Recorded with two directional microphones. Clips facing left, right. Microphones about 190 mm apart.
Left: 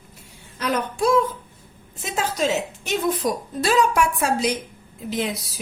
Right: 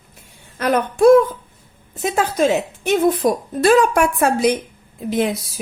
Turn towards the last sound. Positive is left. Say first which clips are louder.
# right 6 dB
turn(degrees=-55)  # may be behind; listen again after turning